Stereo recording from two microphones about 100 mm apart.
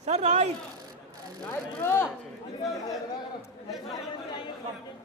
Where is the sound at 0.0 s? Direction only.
90° right.